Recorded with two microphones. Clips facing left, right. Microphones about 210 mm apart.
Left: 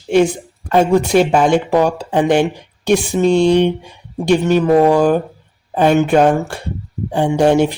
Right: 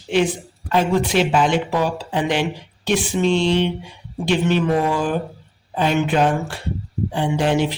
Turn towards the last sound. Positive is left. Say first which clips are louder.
# left 7 dB
turn(degrees=45)  # may be behind; listen again after turning